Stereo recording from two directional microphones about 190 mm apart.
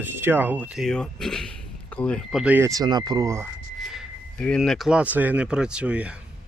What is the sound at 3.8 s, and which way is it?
Speech, centre (ahead or behind).